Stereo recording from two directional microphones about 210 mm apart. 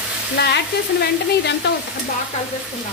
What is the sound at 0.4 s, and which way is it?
Speech, 55° left (ahead or behind).